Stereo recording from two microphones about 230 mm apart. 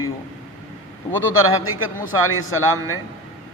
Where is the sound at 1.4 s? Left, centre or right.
Left.